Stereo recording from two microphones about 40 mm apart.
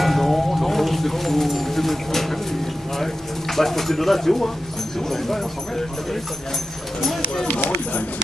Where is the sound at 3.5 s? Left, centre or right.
Centre.